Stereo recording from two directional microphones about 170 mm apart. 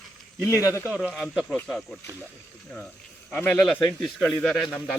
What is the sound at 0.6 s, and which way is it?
Speech, 15° left (ahead or behind).